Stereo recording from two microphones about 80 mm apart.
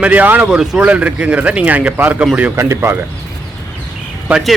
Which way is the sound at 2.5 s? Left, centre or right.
Right.